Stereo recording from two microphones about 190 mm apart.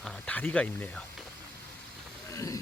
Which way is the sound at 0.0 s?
5° left (ahead or behind).